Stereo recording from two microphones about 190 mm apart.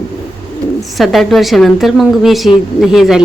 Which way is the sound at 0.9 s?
Centre (ahead or behind).